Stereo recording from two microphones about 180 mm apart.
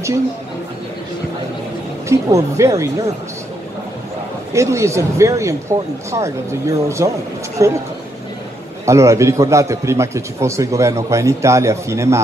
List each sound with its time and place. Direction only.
2.0 s a man's voice: 15° right (ahead or behind)
4.6 s a man's voice: 15° right (ahead or behind)
8.8 s a man's voice: 15° right (ahead or behind)